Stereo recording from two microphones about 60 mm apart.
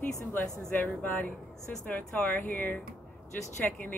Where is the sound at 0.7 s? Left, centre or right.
Left.